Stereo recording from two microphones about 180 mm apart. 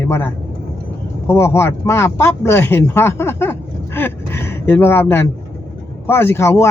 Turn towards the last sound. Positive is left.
turn(degrees=15)  # may be behind; listen again after turning